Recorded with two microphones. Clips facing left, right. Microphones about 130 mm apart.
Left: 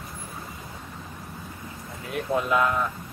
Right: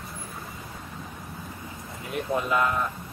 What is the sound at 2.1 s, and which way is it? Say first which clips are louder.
Speech: left 2 dB; centre (ahead or behind).